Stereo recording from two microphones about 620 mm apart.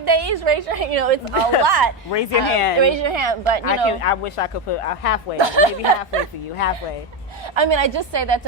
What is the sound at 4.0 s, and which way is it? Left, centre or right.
Speech, left.